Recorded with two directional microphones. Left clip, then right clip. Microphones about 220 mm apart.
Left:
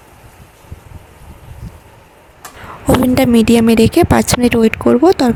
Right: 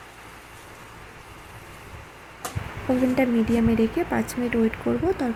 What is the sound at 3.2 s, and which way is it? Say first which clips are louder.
Speech: left 11 dB; 45° left (ahead or behind).